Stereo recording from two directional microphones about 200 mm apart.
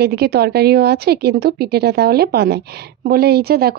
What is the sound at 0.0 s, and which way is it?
Speech, 50° right (ahead or behind).